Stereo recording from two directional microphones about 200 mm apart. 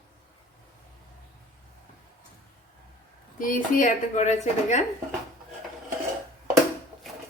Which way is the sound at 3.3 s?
45° left (ahead or behind).